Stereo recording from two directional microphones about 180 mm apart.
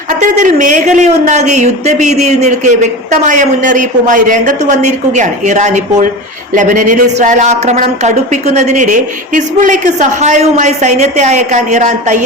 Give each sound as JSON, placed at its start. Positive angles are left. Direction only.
{"t": 0.1, "sound": "speech", "side_deg": -45}